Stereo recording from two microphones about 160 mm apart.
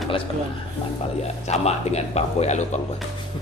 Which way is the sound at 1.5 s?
40° left (ahead or behind).